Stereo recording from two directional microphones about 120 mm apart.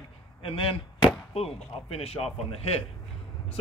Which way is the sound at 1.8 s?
55° left (ahead or behind).